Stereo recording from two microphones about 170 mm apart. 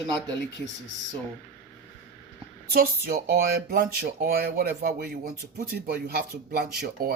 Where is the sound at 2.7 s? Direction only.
60° right (ahead or behind).